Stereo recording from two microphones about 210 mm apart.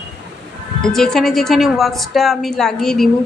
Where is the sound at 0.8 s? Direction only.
Centre (ahead or behind).